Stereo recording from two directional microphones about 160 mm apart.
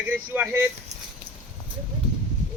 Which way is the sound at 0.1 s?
10° right (ahead or behind).